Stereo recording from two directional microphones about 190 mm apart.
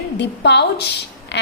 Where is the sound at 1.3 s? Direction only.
65° left (ahead or behind).